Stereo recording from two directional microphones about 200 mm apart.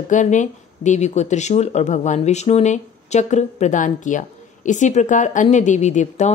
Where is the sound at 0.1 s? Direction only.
40° left (ahead or behind).